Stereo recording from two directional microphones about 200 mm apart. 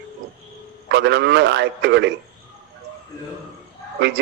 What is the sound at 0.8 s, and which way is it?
A man's voice, 60° right (ahead or behind).